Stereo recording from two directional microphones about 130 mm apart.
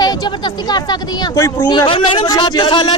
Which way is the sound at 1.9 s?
40° left (ahead or behind).